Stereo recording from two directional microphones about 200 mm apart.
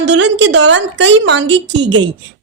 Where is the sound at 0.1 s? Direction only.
60° right (ahead or behind).